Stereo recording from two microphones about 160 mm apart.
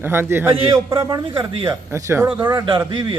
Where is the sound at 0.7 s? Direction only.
25° right (ahead or behind).